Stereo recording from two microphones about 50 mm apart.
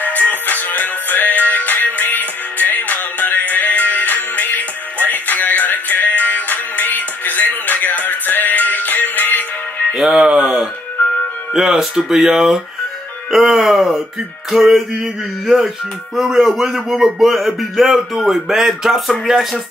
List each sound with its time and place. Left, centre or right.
0.0 s music: left
9.9 s a man's voice: centre